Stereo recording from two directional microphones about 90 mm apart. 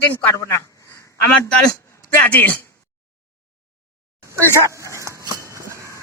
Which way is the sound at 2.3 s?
20° left (ahead or behind).